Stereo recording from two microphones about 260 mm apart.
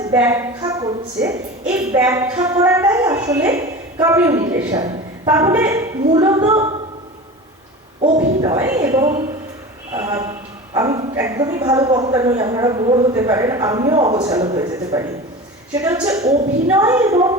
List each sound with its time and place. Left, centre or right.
0.1 s a woman's voice: centre
6.4 s a woman's voice: right
8.0 s speech: right
8.4 s speech: centre